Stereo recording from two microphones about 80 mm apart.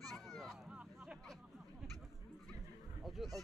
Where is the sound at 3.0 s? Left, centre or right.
Centre.